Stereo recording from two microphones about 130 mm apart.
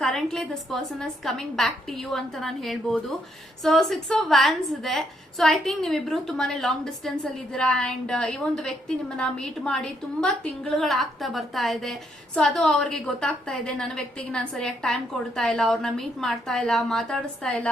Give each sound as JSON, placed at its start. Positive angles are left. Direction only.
{"t": 0.0, "sound": "a woman's voice", "side_deg": 5}